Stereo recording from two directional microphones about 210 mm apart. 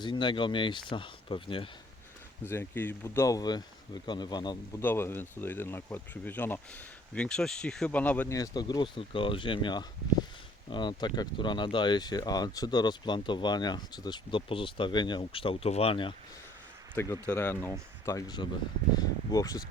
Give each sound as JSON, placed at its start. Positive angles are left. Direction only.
{"t": 0.0, "sound": "speech", "side_deg": 20}
{"t": 2.5, "sound": "speech", "side_deg": 10}
{"t": 16.9, "sound": "speech", "side_deg": 10}